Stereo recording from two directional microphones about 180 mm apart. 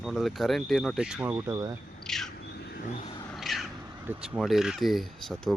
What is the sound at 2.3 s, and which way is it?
Vehicle, 65° left (ahead or behind).